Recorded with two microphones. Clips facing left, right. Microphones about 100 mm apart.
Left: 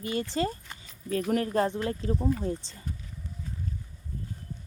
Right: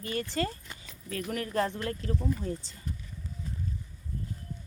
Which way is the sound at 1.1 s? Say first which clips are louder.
Left 7 dB; 30° left (ahead or behind).